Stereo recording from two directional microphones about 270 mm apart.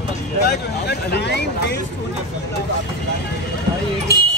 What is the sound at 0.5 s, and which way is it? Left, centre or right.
Speech, left.